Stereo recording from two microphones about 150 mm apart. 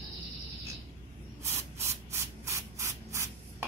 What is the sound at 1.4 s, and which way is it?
Spray, 15° right (ahead or behind).